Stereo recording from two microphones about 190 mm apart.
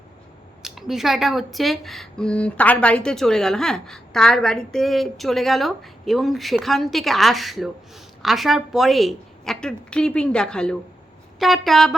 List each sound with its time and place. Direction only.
0.6 s speech: centre (ahead or behind)